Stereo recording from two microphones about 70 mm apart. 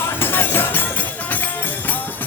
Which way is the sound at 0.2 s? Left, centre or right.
Left.